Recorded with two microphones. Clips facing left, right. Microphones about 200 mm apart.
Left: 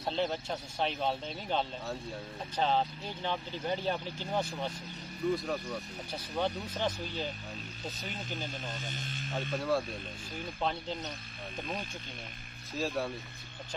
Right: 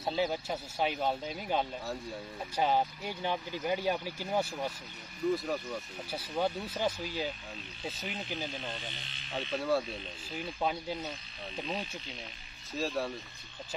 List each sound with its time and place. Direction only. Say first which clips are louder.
0.0 s speech: right 1 dB; 5° right (ahead or behind)
8.6 s speech: left 1 dB; 45° left (ahead or behind)
9.5 s speech: right 1 dB; centre (ahead or behind)
12.7 s speech: even; centre (ahead or behind)